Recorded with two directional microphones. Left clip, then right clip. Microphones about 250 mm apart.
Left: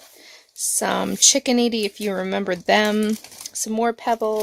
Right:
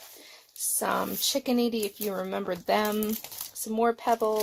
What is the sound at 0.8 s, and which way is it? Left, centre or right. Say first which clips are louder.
Speech: left 8 dB; left.